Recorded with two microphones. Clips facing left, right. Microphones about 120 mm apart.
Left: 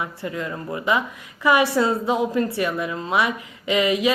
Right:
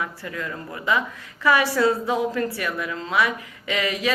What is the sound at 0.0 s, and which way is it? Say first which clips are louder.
A woman's voice: left 2 dB; 20° left (ahead or behind).